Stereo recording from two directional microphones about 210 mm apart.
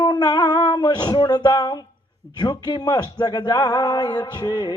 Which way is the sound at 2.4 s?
20° left (ahead or behind).